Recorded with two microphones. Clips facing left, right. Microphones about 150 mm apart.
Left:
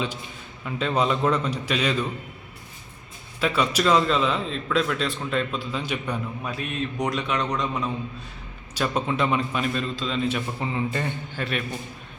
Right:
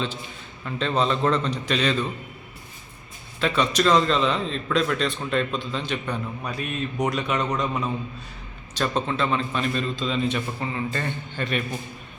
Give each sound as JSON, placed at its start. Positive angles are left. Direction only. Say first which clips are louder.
{"t": 0.6, "sound": "a man's voice", "louder": "even", "side_deg": 5}
{"t": 3.4, "sound": "a man's voice", "louder": "right 1 dB", "side_deg": 10}
{"t": 8.7, "sound": "a man's voice", "louder": "even", "side_deg": 10}
{"t": 10.6, "sound": "a man's voice", "louder": "left 1 dB", "side_deg": 20}
{"t": 11.3, "sound": "a man's voice", "louder": "right 2 dB", "side_deg": 5}